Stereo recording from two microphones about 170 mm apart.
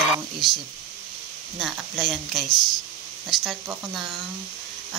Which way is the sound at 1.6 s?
Centre (ahead or behind).